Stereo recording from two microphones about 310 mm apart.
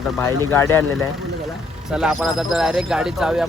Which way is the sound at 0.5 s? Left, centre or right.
Centre.